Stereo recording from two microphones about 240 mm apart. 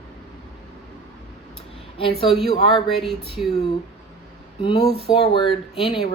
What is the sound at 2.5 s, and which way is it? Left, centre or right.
Speech, centre.